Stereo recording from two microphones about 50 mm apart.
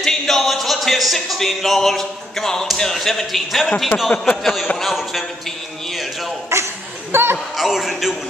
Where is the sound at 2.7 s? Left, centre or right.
Centre.